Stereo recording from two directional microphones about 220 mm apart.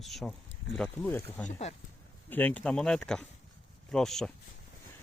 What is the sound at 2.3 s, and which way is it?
Speech, 5° left (ahead or behind).